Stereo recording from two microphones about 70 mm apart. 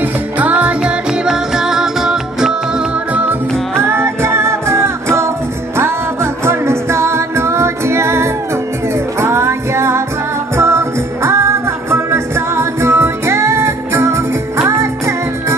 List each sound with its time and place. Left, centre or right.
0.0 s music: right
3.1 s music: right
3.8 s music: right